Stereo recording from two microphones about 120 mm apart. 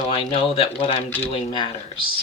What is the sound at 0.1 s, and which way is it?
Speech, 50° left (ahead or behind).